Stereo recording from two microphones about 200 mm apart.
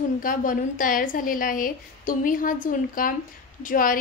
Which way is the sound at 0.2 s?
45° left (ahead or behind).